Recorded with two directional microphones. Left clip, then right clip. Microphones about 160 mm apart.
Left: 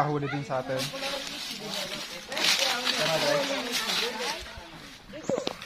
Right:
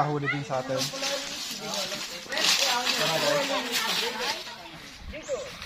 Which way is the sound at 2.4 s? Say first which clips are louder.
Right 1 dB; 15° left (ahead or behind).